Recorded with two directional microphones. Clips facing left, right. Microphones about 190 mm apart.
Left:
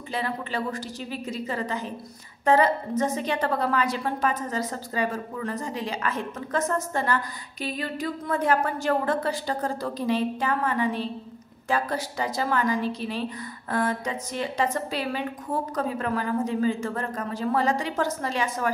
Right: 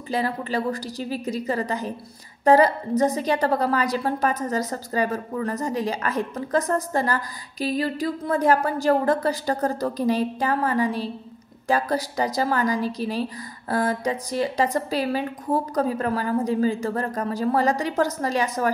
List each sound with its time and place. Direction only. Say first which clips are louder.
0.1 s a woman's voice: right 5 dB; 40° right (ahead or behind)